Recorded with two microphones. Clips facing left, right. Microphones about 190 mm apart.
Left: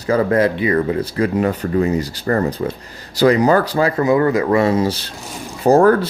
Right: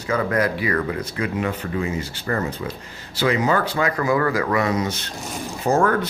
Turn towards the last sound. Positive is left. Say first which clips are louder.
# left 7 dB
turn(degrees=35)  # may be behind; listen again after turning